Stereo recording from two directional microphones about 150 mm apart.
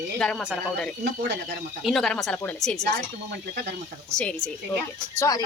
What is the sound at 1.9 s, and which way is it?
Speech, centre (ahead or behind).